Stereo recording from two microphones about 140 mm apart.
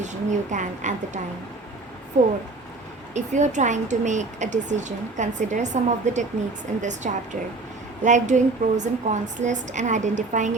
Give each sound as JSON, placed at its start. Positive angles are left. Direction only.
{"t": 0.0, "sound": "a woman's voice", "side_deg": -60}